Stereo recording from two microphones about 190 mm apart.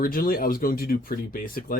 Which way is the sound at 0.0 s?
50° left (ahead or behind).